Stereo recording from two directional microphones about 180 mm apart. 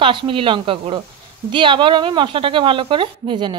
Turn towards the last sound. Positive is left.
turn(degrees=-25)  # may be behind; listen again after turning